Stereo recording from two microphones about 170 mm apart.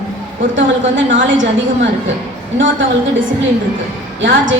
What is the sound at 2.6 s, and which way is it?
Speech, 90° right.